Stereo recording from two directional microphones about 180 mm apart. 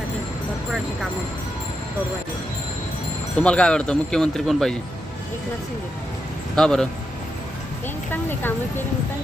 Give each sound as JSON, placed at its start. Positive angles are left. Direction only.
{"t": 3.3, "sound": "speech", "side_deg": 5}
{"t": 6.6, "sound": "speech", "side_deg": 5}
{"t": 8.1, "sound": "a woman's voice", "side_deg": 10}